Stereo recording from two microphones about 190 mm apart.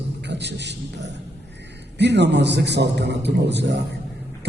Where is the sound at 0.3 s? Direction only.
65° right (ahead or behind).